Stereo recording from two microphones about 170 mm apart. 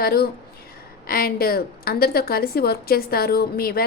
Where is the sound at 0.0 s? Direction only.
65° left (ahead or behind).